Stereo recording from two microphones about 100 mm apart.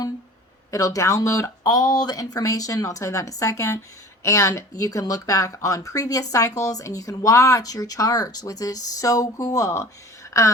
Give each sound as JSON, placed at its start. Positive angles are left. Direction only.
{"t": 0.7, "sound": "speech", "side_deg": 35}